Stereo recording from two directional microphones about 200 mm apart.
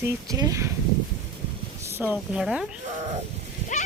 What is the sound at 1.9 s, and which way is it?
Speech, 10° right (ahead or behind).